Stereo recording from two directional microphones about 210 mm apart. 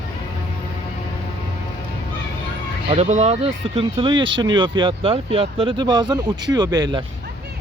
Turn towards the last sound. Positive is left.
turn(degrees=-20)  # may be behind; listen again after turning